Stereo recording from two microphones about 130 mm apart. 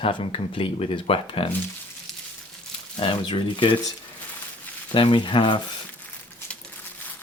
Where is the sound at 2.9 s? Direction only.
40° left (ahead or behind).